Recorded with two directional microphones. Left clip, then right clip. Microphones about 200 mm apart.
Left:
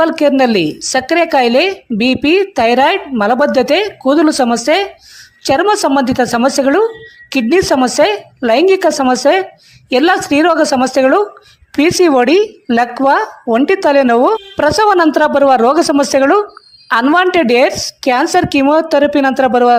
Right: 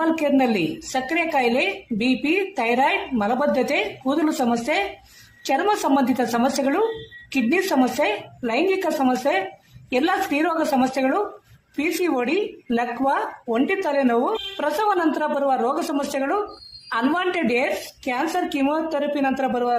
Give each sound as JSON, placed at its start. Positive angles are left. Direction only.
{"t": 0.0, "sound": "a woman's voice", "side_deg": 45}